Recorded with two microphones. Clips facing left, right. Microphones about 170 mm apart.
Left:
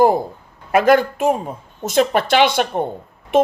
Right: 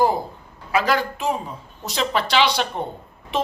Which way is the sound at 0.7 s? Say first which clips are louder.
Left 7 dB; 55° left (ahead or behind).